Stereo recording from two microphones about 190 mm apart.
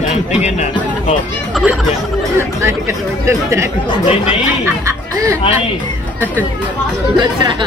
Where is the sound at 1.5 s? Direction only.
Centre (ahead or behind).